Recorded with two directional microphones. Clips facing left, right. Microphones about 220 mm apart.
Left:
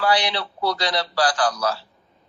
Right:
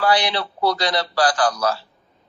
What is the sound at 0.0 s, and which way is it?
A man's voice, 50° right (ahead or behind).